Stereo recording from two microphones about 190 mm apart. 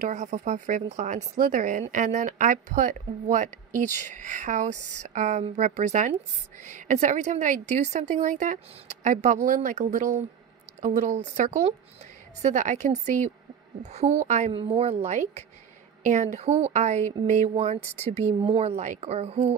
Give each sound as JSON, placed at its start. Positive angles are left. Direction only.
{"t": 0.0, "sound": "speech", "side_deg": -40}